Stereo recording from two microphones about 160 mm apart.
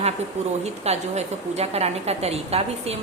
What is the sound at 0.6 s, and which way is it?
A woman's voice, 40° right (ahead or behind).